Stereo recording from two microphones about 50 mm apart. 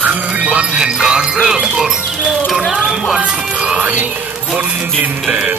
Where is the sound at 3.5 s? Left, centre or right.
Right.